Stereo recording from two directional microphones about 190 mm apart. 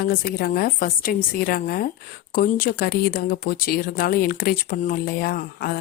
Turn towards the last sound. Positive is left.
turn(degrees=50)  # may be behind; listen again after turning